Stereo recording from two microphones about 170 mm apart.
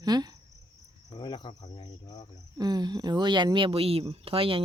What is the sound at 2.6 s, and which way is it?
Speech, 25° right (ahead or behind).